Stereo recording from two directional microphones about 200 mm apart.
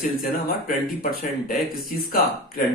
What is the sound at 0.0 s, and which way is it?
Speech, 45° left (ahead or behind).